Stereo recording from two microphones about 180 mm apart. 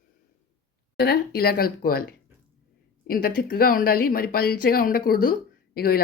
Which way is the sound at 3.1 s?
55° left (ahead or behind).